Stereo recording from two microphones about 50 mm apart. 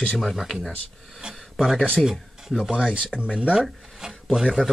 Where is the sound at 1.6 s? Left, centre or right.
Centre.